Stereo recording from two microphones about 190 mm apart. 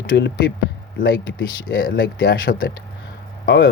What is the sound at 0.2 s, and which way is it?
Speech, 65° left (ahead or behind).